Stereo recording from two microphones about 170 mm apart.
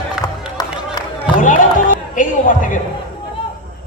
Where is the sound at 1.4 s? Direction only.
50° left (ahead or behind).